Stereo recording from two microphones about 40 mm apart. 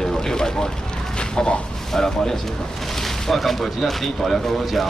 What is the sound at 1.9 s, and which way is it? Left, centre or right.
Speech, centre.